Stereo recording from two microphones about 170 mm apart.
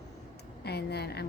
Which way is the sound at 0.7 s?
75° left (ahead or behind).